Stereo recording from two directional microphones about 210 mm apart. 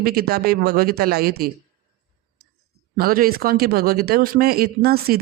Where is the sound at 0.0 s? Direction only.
45° right (ahead or behind).